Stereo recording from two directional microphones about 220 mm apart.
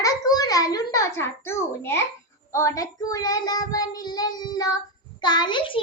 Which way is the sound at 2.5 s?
15° left (ahead or behind).